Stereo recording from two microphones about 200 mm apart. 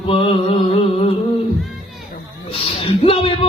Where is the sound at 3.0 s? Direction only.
30° left (ahead or behind).